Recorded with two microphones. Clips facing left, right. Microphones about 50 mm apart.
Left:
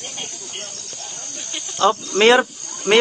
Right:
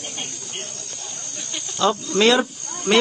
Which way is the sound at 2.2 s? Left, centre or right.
Left.